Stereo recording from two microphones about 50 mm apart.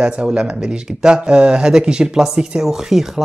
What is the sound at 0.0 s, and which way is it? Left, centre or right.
Speech, centre.